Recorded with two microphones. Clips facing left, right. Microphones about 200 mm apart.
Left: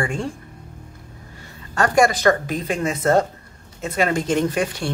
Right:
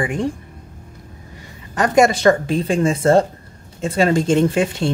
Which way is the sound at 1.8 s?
25° right (ahead or behind).